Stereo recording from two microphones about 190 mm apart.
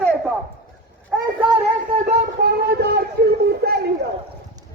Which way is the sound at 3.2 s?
55° right (ahead or behind).